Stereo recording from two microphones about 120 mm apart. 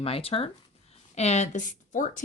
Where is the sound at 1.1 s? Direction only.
65° left (ahead or behind); by 2.2 s 90° left.